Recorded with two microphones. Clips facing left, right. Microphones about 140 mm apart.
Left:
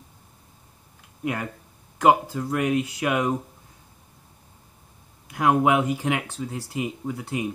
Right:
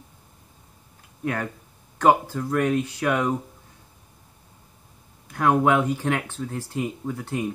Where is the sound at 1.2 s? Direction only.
5° left (ahead or behind).